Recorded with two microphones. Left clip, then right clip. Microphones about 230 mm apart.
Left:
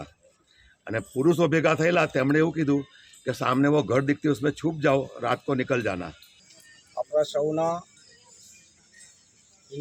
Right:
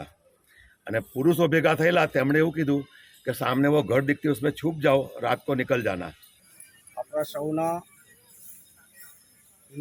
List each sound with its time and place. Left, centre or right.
0.9 s speech: centre